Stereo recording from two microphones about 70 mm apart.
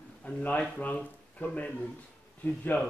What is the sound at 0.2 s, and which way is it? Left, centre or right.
Speech, left.